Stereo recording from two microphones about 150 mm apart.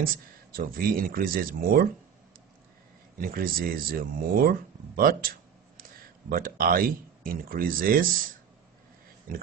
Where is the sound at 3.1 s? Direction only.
75° right (ahead or behind).